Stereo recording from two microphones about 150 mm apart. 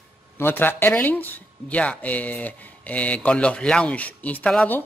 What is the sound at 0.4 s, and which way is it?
A man's voice, 15° left (ahead or behind).